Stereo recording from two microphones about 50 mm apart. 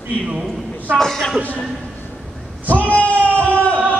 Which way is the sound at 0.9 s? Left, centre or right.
Centre.